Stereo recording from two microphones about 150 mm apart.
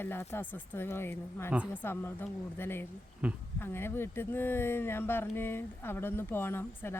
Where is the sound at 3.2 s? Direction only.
5° right (ahead or behind).